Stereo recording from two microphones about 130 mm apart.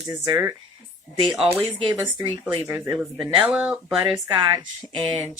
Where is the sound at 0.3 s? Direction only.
25° right (ahead or behind).